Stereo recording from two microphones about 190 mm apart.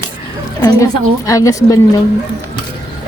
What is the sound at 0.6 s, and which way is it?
A woman's voice, 20° left (ahead or behind).